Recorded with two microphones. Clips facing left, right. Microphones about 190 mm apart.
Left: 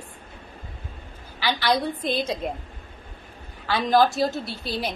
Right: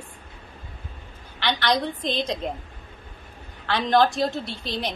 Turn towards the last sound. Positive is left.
turn(degrees=5)  # may be behind; listen again after turning